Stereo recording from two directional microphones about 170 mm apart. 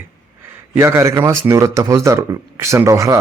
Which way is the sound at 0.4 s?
15° right (ahead or behind).